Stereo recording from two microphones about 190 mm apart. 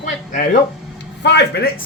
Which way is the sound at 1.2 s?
65° left (ahead or behind).